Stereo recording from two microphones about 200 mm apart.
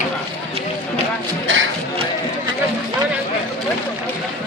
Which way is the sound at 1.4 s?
85° right.